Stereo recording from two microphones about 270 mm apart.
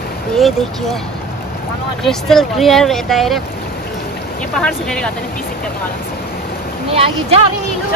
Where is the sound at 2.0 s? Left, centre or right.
Centre.